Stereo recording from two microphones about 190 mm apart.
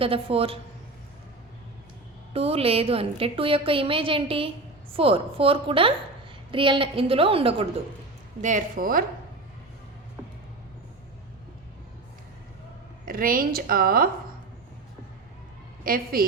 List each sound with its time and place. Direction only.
0.0 s a woman's voice: 30° right (ahead or behind)
2.3 s a woman's voice: 30° right (ahead or behind)
8.4 s a woman's voice: 40° right (ahead or behind)
13.1 s a woman's voice: 50° right (ahead or behind)
15.8 s a woman's voice: 50° right (ahead or behind)